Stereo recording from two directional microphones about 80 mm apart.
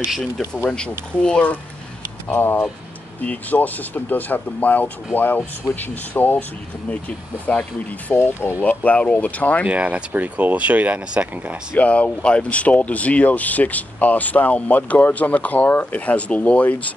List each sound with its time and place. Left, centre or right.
0.7 s speech: centre
8.2 s speech: left
8.6 s speech: centre
9.7 s speech: centre
11.7 s speech: centre